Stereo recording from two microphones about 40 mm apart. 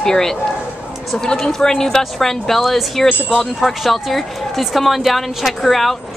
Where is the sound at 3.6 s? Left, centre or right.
Centre.